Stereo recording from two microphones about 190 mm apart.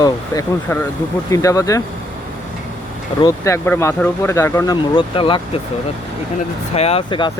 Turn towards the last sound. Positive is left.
turn(degrees=25)  # may be behind; listen again after turning